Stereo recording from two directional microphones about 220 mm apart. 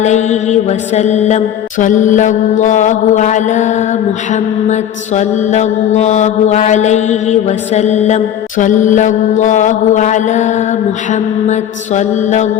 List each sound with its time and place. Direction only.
0.0 s mantra: 30° left (ahead or behind)